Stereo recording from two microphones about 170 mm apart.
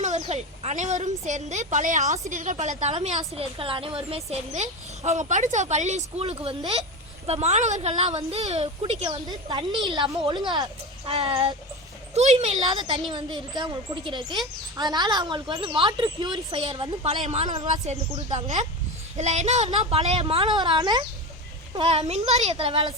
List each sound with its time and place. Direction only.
0.0 s a woman's voice: 45° right (ahead or behind)
9.0 s speech: 25° right (ahead or behind)
12.1 s a woman's voice: 40° right (ahead or behind)
13.1 s speech: 25° right (ahead or behind)
17.8 s a woman's voice: 40° right (ahead or behind); by 21.0 s 25° right (ahead or behind)
21.8 s a woman's voice: 40° right (ahead or behind)